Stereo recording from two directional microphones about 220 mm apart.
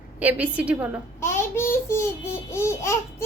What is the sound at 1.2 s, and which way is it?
A child's voice, 10° left (ahead or behind).